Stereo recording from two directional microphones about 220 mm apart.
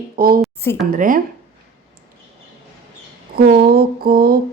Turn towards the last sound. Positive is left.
turn(degrees=-45)  # may be behind; listen again after turning